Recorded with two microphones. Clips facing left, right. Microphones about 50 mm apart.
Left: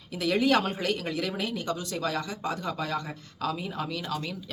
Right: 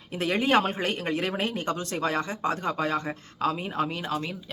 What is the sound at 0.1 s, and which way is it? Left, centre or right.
Speech, right.